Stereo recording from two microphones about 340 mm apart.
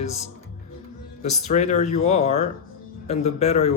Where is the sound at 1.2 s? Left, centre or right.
Left.